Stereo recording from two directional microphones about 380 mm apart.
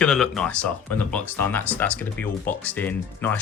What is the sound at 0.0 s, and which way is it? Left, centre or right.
Speech, centre.